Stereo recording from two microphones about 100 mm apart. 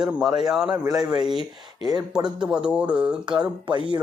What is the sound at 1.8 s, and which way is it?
Speech, 45° right (ahead or behind).